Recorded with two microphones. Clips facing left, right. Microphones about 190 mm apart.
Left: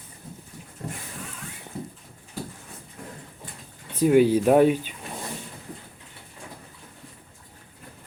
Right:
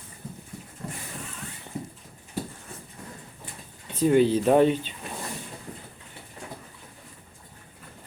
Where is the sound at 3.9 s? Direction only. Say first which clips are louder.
Left 2 dB; 10° left (ahead or behind).